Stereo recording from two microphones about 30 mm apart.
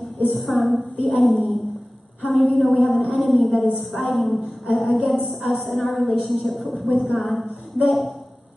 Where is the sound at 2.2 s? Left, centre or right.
Centre.